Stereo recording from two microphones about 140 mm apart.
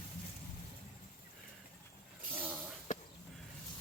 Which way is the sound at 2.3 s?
10° right (ahead or behind).